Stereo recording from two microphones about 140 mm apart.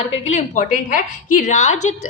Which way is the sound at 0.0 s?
55° left (ahead or behind).